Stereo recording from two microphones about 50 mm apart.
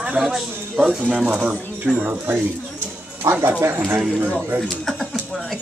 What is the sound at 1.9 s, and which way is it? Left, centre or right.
Speech, right.